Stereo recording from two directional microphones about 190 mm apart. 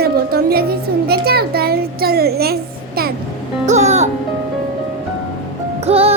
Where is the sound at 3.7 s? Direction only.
35° right (ahead or behind).